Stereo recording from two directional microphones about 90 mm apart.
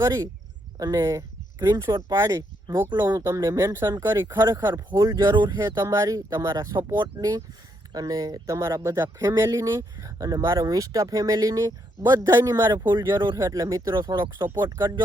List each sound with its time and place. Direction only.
0.0 s speech: 35° right (ahead or behind)
1.9 s speech: 50° right (ahead or behind)
2.9 s speech: 50° right (ahead or behind)
3.2 s speech: 35° right (ahead or behind)
4.0 s speech: 30° right (ahead or behind)
4.4 s speech: 50° right (ahead or behind)
5.4 s speech: 50° right (ahead or behind)
5.8 s speech: 35° right (ahead or behind)
6.7 s speech: 55° right (ahead or behind); by 9.5 s 35° right (ahead or behind)
9.5 s speech: 50° right (ahead or behind)
13.4 s speech: 40° right (ahead or behind)
13.9 s speech: 55° right (ahead or behind)